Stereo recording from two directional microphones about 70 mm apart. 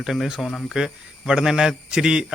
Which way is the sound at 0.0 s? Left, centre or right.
Centre.